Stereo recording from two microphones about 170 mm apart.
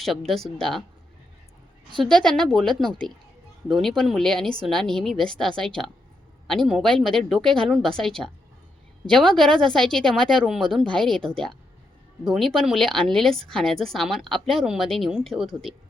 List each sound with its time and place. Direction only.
0.0 s a woman's voice: centre (ahead or behind)
2.1 s a woman's voice: 5° left (ahead or behind)